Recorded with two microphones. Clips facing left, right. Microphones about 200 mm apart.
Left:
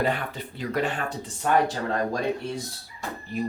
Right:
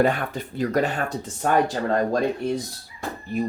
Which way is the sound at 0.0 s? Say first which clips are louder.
Right 5 dB; 45° right (ahead or behind).